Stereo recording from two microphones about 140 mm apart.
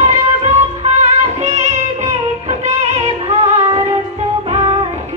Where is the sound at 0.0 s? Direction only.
50° right (ahead or behind).